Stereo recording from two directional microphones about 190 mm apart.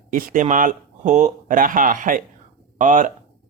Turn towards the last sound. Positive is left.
turn(degrees=-45)  # may be behind; listen again after turning